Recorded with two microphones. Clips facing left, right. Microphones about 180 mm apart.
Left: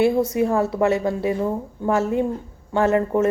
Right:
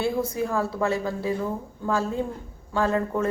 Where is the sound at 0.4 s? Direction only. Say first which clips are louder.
Left 5 dB; 20° left (ahead or behind).